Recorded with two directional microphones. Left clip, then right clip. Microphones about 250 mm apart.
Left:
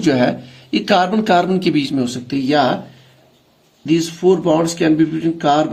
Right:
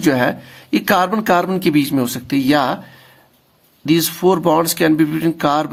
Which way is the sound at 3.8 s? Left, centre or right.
Right.